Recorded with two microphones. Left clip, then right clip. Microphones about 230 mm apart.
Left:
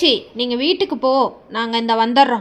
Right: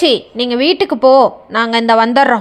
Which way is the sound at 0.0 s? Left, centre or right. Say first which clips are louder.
Right 4 dB; right.